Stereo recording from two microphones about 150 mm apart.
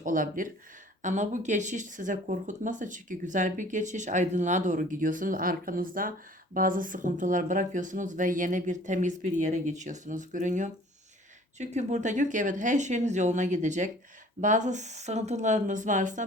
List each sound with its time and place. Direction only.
0.0 s speech: 65° right (ahead or behind)